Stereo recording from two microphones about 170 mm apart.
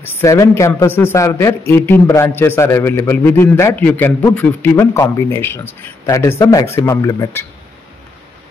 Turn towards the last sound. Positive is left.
turn(degrees=20)  # may be behind; listen again after turning